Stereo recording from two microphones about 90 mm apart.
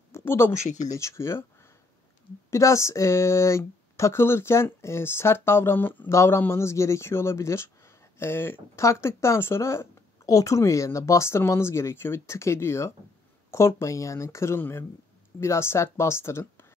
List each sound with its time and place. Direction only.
0.1 s a sound: 25° left (ahead or behind)
0.9 s speech: 30° left (ahead or behind)
2.5 s speech: 35° left (ahead or behind)